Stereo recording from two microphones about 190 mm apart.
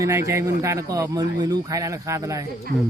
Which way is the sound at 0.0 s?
15° right (ahead or behind).